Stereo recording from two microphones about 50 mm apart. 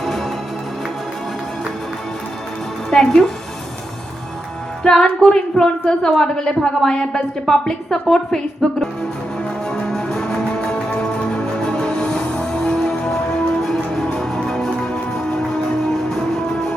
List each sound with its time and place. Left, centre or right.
0.0 s music: centre
2.9 s a woman's voice: centre
4.8 s music: centre
5.2 s a woman's voice: centre
9.6 s music: centre
13.6 s music: centre
16.0 s music: centre